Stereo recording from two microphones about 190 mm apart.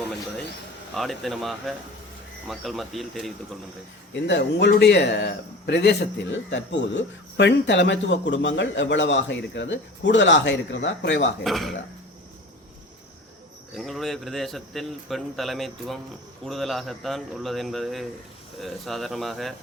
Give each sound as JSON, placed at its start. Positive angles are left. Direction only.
{"t": 0.9, "sound": "speech", "side_deg": 0}
{"t": 4.1, "sound": "speech", "side_deg": 65}
{"t": 11.4, "sound": "speech", "side_deg": 0}
{"t": 13.7, "sound": "speech", "side_deg": 0}